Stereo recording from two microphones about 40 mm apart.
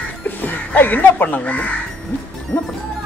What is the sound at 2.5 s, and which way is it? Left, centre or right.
Music, left.